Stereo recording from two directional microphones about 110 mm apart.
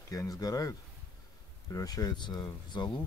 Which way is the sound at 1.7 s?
35° left (ahead or behind).